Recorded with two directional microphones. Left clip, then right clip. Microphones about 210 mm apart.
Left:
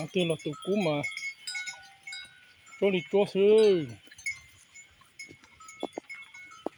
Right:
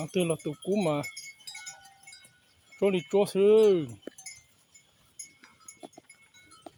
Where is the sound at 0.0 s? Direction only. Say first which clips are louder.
Even; 5° right (ahead or behind).